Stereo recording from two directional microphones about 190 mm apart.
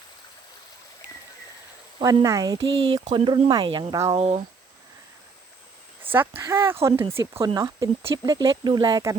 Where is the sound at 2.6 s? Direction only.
80° right.